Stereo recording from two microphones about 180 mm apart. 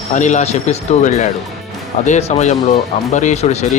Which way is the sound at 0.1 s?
40° left (ahead or behind).